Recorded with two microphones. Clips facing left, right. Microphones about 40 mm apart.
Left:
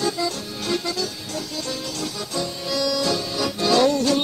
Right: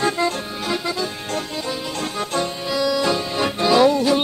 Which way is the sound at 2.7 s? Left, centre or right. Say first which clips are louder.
Right 3 dB; centre.